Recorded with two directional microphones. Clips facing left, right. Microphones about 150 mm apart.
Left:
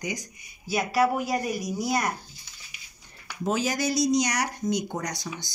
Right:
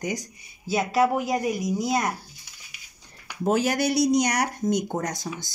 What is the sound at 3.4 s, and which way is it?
Speech, 60° right (ahead or behind).